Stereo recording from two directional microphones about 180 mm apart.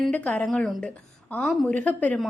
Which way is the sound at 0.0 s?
Centre (ahead or behind).